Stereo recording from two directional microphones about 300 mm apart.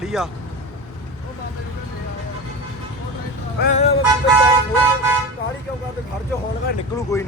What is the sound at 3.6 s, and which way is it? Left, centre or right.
Music, left.